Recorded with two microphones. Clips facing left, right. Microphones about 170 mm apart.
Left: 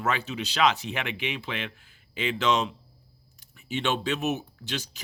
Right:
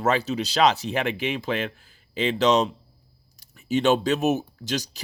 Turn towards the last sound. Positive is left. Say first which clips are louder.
# right 6 dB
turn(degrees=-40)  # may be behind; listen again after turning